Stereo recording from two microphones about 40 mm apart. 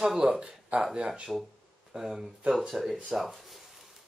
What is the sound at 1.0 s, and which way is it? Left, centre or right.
Speech, right.